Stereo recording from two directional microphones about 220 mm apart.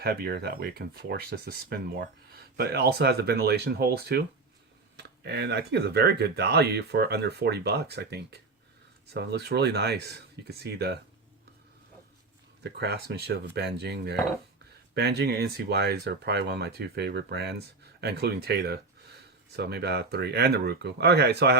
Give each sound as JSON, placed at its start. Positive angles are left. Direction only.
{"t": 0.0, "sound": "speech", "side_deg": -45}
{"t": 12.6, "sound": "speech", "side_deg": -50}